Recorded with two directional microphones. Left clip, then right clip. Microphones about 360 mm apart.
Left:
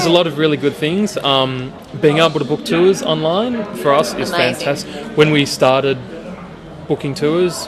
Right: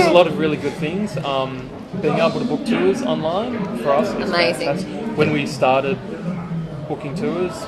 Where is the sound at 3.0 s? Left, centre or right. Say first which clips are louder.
Left 5 dB; left.